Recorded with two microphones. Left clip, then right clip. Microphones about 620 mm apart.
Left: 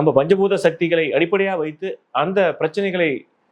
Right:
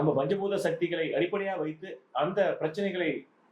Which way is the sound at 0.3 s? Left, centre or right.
Left.